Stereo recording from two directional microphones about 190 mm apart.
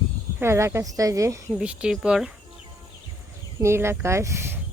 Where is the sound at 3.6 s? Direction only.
15° right (ahead or behind).